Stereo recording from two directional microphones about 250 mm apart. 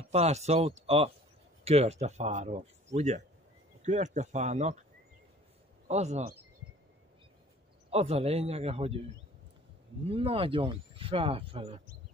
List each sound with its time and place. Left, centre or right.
0.1 s speech: right
5.9 s speech: right
7.9 s speech: right
10.0 s speech: right